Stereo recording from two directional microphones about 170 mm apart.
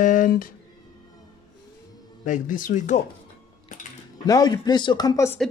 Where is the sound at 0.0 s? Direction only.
55° left (ahead or behind).